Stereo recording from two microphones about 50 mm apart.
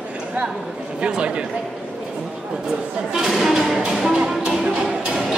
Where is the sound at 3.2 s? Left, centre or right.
Centre.